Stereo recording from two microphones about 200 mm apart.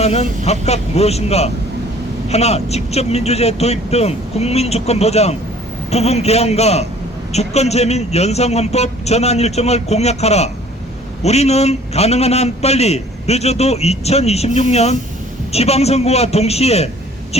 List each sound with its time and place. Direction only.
0.0 s a man's voice: 30° left (ahead or behind)